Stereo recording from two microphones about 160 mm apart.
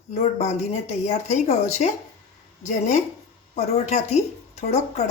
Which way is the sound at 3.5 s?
45° left (ahead or behind).